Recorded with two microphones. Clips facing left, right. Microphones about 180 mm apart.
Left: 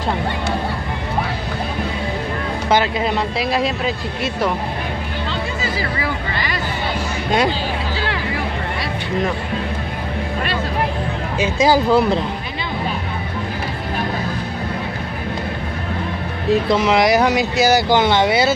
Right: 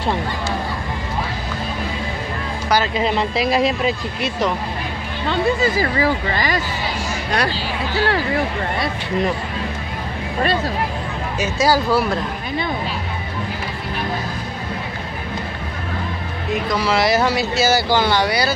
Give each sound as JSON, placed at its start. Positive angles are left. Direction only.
{"t": 3.0, "sound": "speech", "side_deg": 0}
{"t": 5.3, "sound": "speech", "side_deg": -55}
{"t": 5.9, "sound": "speech", "side_deg": -40}
{"t": 7.2, "sound": "speech", "side_deg": 20}
{"t": 11.6, "sound": "speech", "side_deg": 20}
{"t": 16.6, "sound": "speech", "side_deg": 20}